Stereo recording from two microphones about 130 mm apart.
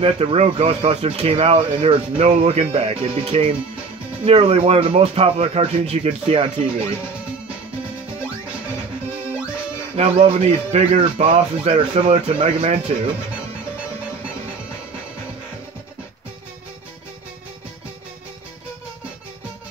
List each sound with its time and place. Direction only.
0.0 s speech: 45° right (ahead or behind)
9.9 s speech: 55° right (ahead or behind)